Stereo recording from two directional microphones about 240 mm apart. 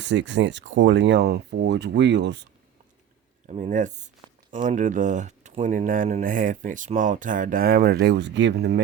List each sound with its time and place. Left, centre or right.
0.0 s speech: right
3.4 s speech: right